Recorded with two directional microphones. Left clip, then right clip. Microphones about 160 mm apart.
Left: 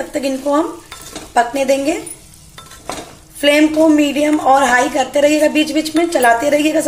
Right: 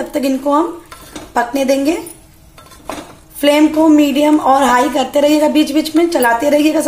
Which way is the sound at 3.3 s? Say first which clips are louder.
Right 1 dB; 5° right (ahead or behind).